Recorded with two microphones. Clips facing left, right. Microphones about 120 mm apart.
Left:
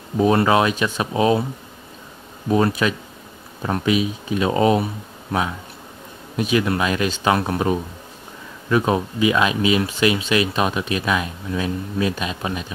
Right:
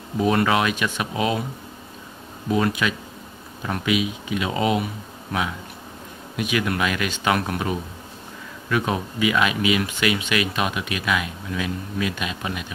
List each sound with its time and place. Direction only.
0.2 s speech: 30° left (ahead or behind)
2.5 s speech: 35° left (ahead or behind)
6.3 s speech: 30° left (ahead or behind)